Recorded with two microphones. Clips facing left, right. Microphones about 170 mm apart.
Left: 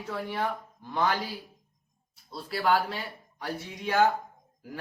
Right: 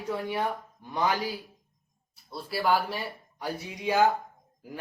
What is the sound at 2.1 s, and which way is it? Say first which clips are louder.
Speech: right 1 dB; 10° right (ahead or behind).